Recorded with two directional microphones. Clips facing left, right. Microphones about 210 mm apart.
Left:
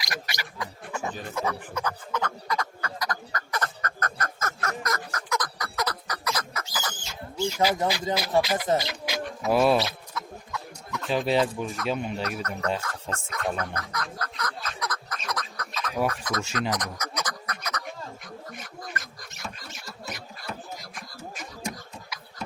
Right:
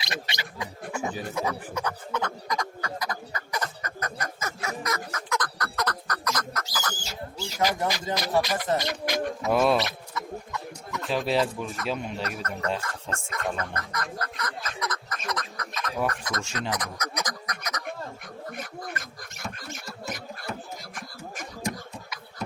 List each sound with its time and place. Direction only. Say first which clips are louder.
0.0 s a sound: right 1 dB; 25° right (ahead or behind); by 6.7 s 10° left (ahead or behind)
7.0 s pig: left 6 dB; 35° right (ahead or behind)
7.9 s speech: left 2 dB; 5° left (ahead or behind)
9.4 s mouse: left 2 dB; centre (ahead or behind)
15.3 s duck: right 1 dB; centre (ahead or behind)
17.2 s duck: even; 15° right (ahead or behind)
18.5 s a sound: right 3 dB; 55° right (ahead or behind)